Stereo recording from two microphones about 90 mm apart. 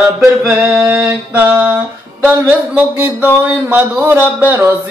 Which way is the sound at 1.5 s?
25° right (ahead or behind).